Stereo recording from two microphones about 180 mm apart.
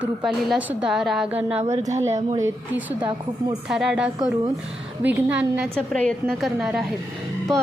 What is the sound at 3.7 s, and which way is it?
A woman's voice, 5° right (ahead or behind).